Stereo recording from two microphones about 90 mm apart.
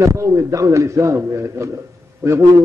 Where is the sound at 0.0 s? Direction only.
35° right (ahead or behind).